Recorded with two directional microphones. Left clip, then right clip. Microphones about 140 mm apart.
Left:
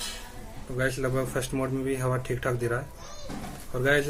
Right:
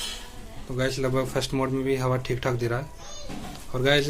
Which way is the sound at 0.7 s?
50° right (ahead or behind).